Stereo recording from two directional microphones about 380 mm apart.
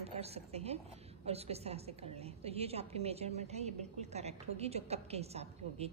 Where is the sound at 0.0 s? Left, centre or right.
Centre.